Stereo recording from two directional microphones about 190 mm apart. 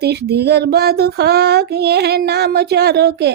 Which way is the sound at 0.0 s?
60° right (ahead or behind).